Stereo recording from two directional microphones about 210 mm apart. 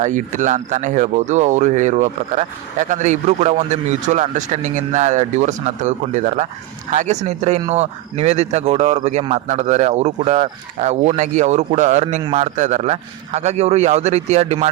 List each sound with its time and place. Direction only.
0.0 s speech: 35° right (ahead or behind)